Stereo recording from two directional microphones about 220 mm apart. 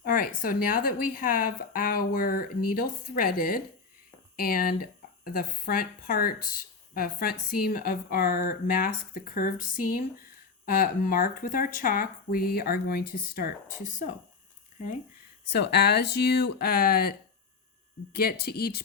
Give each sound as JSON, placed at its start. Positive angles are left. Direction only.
{"t": 0.0, "sound": "speech", "side_deg": 40}
{"t": 15.5, "sound": "speech", "side_deg": 50}